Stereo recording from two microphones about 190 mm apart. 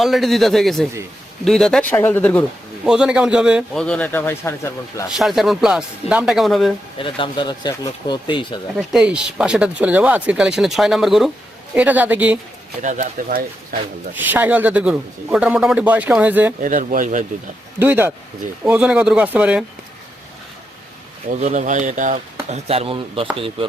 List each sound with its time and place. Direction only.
0.0 s speech: centre (ahead or behind)
2.8 s speech: 5° right (ahead or behind); by 5.0 s 15° left (ahead or behind)
5.0 s speech: centre (ahead or behind)
7.0 s speech: 25° left (ahead or behind)
8.9 s a man's voice: 5° right (ahead or behind)
12.8 s speech: 40° right (ahead or behind)
14.2 s a man's voice: 10° right (ahead or behind)
16.6 s speech: 45° right (ahead or behind)
17.7 s a man's voice: 10° right (ahead or behind)
21.4 s speech: 40° right (ahead or behind)